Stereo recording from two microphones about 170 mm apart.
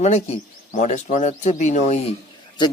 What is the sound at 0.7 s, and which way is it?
Speech, 45° left (ahead or behind).